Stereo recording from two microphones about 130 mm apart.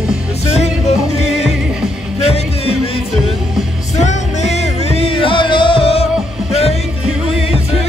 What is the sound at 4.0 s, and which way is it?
Music, 60° left (ahead or behind).